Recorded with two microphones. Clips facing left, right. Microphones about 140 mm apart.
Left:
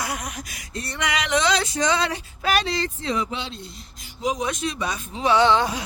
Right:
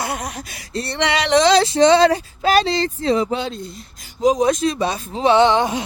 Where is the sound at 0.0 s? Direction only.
30° right (ahead or behind).